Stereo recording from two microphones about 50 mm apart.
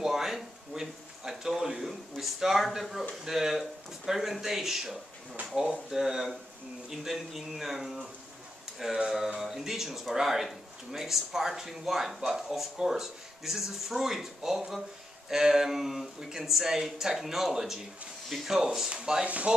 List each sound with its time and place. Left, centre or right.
0.0 s a sound: centre
3.3 s speech: centre
19.2 s speech: right